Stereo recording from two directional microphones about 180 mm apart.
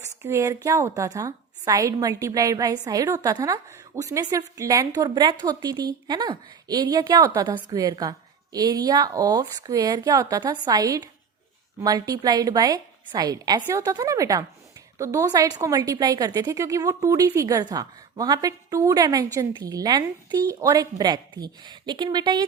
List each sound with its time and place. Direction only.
0.2 s a woman's voice: 15° right (ahead or behind)